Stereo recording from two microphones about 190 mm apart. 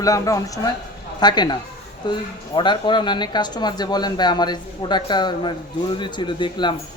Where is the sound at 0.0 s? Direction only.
15° left (ahead or behind).